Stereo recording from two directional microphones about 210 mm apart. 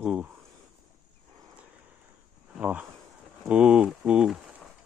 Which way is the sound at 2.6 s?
5° right (ahead or behind).